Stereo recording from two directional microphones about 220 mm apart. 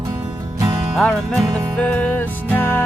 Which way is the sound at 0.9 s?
Centre (ahead or behind).